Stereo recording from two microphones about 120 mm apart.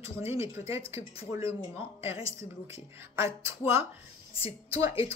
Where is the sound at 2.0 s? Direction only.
25° right (ahead or behind).